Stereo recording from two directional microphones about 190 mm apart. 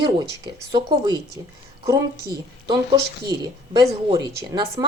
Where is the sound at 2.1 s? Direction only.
55° right (ahead or behind).